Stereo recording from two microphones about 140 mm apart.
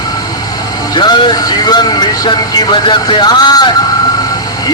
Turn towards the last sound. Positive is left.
turn(degrees=30)  # may be behind; listen again after turning